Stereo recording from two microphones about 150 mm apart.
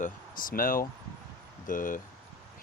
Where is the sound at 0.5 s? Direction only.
70° left (ahead or behind).